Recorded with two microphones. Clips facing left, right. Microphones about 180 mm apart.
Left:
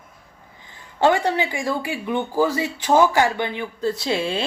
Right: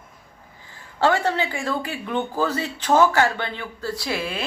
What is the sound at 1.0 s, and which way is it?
Speech, 15° left (ahead or behind).